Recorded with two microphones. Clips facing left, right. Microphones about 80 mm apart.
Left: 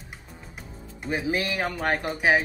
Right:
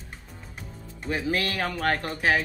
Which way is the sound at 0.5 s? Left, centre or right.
Centre.